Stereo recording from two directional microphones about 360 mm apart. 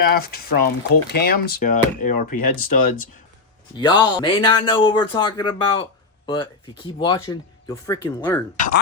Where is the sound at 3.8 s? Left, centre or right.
Centre.